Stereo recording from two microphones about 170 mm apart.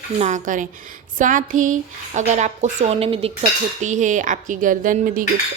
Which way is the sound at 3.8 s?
45° right (ahead or behind).